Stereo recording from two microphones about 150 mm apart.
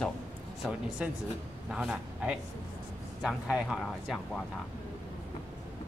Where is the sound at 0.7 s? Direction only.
5° right (ahead or behind).